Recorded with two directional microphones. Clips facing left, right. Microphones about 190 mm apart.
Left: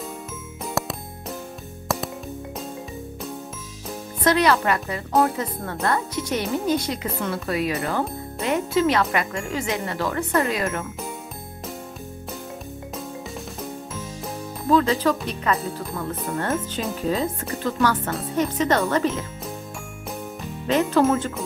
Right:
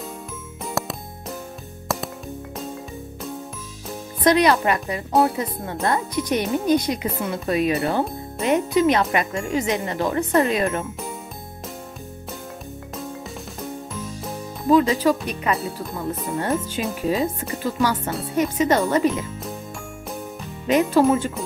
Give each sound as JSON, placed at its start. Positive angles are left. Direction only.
{"t": 0.7, "sound": "music", "side_deg": 0}
{"t": 4.2, "sound": "speech", "side_deg": -15}
{"t": 14.7, "sound": "speech", "side_deg": -15}
{"t": 17.5, "sound": "speech", "side_deg": 0}
{"t": 18.3, "sound": "speech", "side_deg": -10}
{"t": 20.6, "sound": "speech", "side_deg": -15}